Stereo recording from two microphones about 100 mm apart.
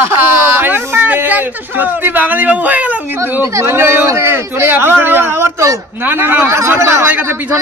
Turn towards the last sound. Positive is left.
turn(degrees=-25)  # may be behind; listen again after turning